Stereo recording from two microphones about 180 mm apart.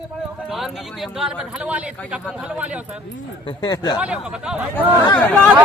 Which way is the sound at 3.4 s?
25° left (ahead or behind).